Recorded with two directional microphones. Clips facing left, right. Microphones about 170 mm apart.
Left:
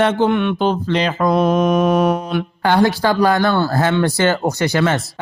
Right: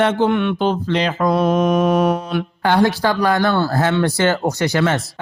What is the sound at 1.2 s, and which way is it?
Speech, 20° left (ahead or behind).